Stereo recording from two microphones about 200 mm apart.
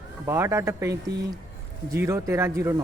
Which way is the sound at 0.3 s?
15° right (ahead or behind).